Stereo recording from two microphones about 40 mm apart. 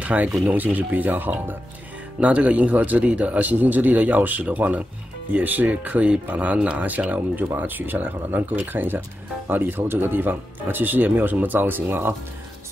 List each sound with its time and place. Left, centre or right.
0.0 s speech: right
2.1 s speech: right
5.8 s speech: right
7.4 s speech: right